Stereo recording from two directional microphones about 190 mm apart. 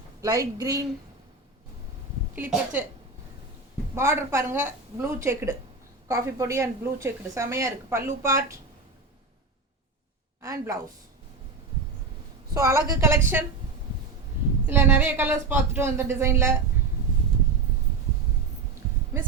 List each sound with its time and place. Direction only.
0.2 s a woman's voice: 15° right (ahead or behind)
2.3 s a woman's voice: 10° right (ahead or behind)
3.9 s a woman's voice: 15° right (ahead or behind)
10.4 s a woman's voice: 15° right (ahead or behind)
12.5 s a woman's voice: 15° right (ahead or behind)
14.7 s a woman's voice: 10° right (ahead or behind)
19.1 s a woman's voice: 15° right (ahead or behind)